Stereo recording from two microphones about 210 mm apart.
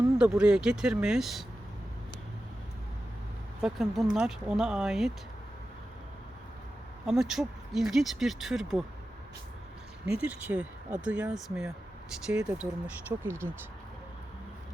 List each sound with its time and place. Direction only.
0.2 s speech: 5° right (ahead or behind)
3.6 s speech: centre (ahead or behind)
7.0 s speech: centre (ahead or behind)
10.1 s speech: 5° right (ahead or behind)